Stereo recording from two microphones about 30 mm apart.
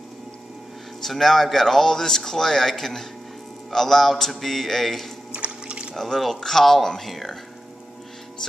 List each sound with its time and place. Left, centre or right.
1.0 s speech: centre
5.3 s water: right
5.9 s speech: centre